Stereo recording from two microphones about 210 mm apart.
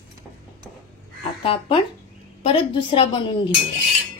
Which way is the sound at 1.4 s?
25° left (ahead or behind).